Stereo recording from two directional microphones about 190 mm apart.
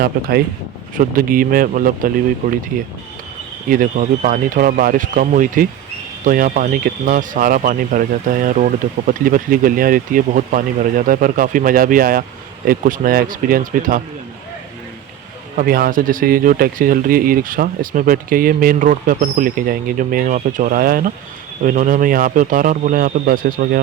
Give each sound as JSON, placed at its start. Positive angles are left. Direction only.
{"t": 0.0, "sound": "speech", "side_deg": -55}
{"t": 3.7, "sound": "speech", "side_deg": -45}
{"t": 15.5, "sound": "speech", "side_deg": -50}